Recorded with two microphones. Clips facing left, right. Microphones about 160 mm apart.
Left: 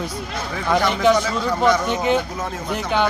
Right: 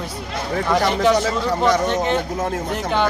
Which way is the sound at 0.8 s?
35° right (ahead or behind).